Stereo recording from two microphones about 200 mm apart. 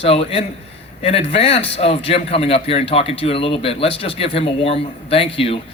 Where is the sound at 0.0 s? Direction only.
30° left (ahead or behind).